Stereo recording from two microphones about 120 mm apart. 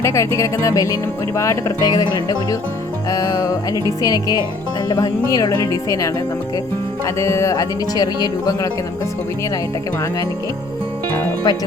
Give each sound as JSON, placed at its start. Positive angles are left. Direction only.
{"t": 0.0, "sound": "speech", "side_deg": 25}
{"t": 1.4, "sound": "music", "side_deg": 25}
{"t": 4.9, "sound": "speech", "side_deg": 30}
{"t": 11.5, "sound": "music", "side_deg": 35}